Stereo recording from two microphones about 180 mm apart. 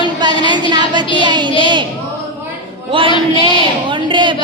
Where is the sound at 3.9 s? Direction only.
25° right (ahead or behind).